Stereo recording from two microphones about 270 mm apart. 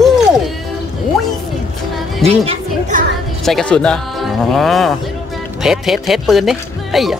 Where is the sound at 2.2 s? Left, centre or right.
Right.